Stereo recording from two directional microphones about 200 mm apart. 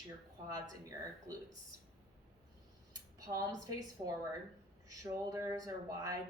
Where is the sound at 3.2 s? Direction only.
15° right (ahead or behind).